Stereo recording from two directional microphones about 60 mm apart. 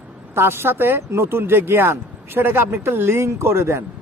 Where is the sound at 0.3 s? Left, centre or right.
Right.